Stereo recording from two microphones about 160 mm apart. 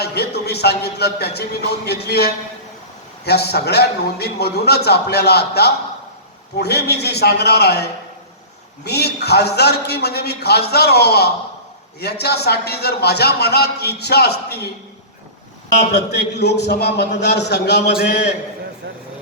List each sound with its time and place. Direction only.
0.0 s a man's voice: 90° left
15.9 s a man's voice: 90° left